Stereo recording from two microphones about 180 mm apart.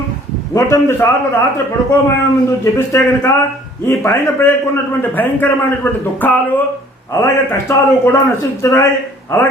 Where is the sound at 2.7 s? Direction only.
15° left (ahead or behind).